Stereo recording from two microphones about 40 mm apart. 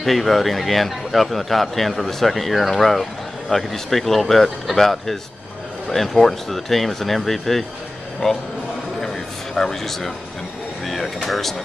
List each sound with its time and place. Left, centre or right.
0.0 s a man's voice: centre
8.2 s speech: centre
9.0 s a sound: centre
10.9 s a man's voice: centre